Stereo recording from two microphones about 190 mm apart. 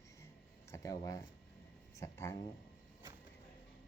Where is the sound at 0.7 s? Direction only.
20° left (ahead or behind).